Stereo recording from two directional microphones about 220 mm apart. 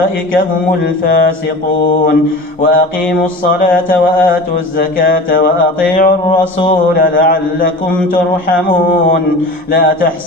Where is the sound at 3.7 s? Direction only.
10° left (ahead or behind).